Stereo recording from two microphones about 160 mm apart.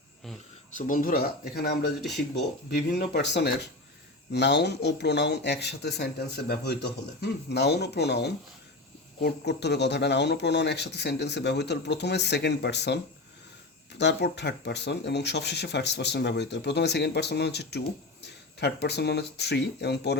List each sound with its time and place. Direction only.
0.8 s speech: 55° left (ahead or behind); by 13.0 s 90° left
14.0 s speech: 90° left